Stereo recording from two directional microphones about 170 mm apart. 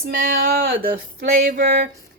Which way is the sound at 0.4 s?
60° right (ahead or behind).